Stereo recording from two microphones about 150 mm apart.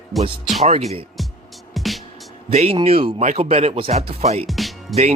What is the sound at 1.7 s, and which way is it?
Music, centre (ahead or behind).